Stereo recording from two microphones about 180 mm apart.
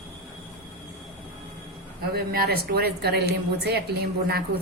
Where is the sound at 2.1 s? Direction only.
60° right (ahead or behind).